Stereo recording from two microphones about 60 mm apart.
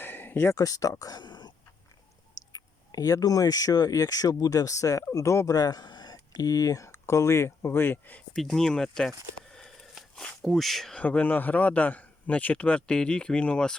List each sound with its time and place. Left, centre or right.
0.0 s a sound: left
0.5 s speech: left
2.5 s speech: left
5.5 s speech: left
6.8 s speech: left
8.4 s speech: centre
9.5 s a sound: centre
10.4 s speech: centre
11.0 s a man's voice: left